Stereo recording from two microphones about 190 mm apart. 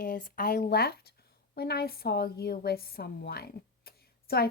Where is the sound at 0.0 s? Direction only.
50° left (ahead or behind).